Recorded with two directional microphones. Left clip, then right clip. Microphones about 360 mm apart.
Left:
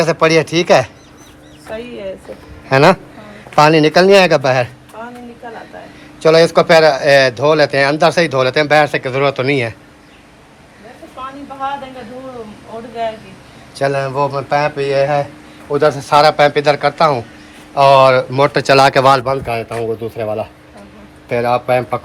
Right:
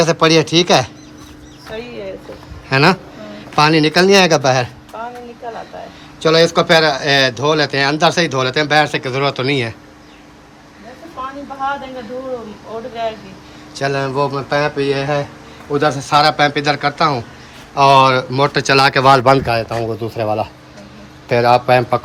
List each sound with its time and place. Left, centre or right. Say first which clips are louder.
0.0 s speech: even; centre
2.6 s a man's voice: left 3 dB; centre
5.0 s a sound: right 3 dB; right
6.1 s speech: left 3 dB; centre
13.7 s speech: left 2 dB; centre